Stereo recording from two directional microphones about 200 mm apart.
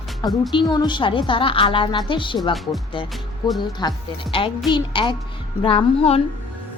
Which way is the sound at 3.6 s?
20° left (ahead or behind).